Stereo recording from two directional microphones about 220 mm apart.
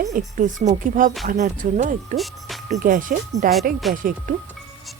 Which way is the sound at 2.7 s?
35° right (ahead or behind).